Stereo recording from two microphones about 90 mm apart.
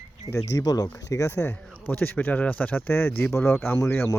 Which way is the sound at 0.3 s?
40° left (ahead or behind).